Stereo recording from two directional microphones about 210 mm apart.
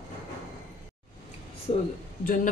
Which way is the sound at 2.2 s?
40° left (ahead or behind).